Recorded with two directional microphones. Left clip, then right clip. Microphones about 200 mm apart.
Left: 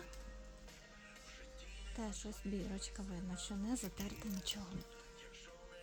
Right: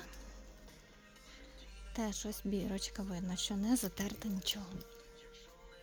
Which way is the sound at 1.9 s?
45° right (ahead or behind).